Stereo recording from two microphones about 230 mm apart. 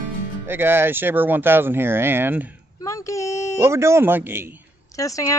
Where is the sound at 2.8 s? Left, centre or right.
Centre.